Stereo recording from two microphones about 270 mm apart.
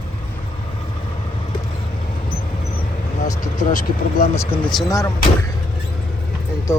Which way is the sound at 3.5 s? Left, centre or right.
Left.